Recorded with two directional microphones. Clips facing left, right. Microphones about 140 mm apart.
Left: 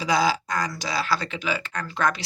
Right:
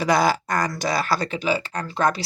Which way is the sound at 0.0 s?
55° right (ahead or behind).